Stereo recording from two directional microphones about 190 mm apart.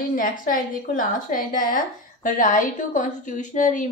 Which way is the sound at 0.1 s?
45° left (ahead or behind).